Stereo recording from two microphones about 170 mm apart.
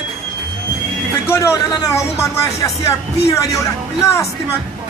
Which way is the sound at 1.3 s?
15° left (ahead or behind).